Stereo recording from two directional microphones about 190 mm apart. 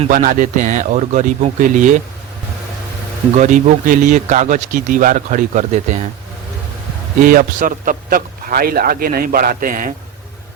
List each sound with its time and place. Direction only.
0.1 s a man's voice: 45° right (ahead or behind)
3.3 s a man's voice: 40° right (ahead or behind)
7.2 s a man's voice: 45° right (ahead or behind)